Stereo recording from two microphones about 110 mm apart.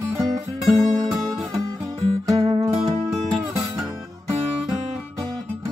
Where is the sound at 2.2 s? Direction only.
35° right (ahead or behind).